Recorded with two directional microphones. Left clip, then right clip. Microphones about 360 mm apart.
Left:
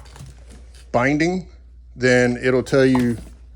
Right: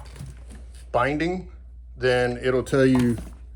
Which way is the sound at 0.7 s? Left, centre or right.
Centre.